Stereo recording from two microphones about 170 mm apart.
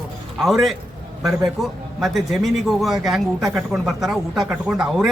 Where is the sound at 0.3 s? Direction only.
Centre (ahead or behind).